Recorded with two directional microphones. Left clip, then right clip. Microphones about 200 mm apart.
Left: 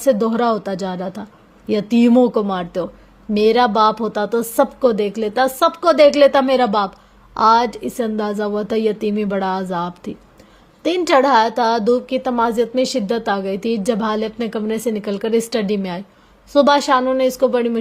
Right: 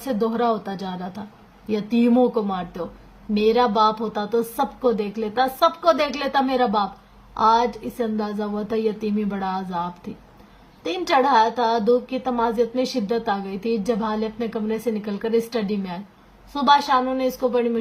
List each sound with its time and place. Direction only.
0.0 s a woman's voice: 40° left (ahead or behind)